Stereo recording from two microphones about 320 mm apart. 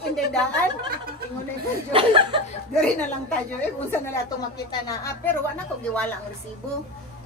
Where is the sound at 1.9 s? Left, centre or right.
Centre.